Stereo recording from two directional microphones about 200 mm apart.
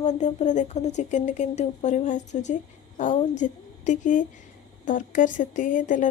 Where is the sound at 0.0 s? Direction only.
35° left (ahead or behind).